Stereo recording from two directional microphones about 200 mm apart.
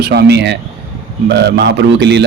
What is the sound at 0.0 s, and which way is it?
Speech, 55° right (ahead or behind).